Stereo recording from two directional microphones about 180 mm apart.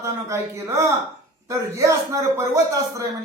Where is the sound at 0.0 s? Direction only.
15° right (ahead or behind).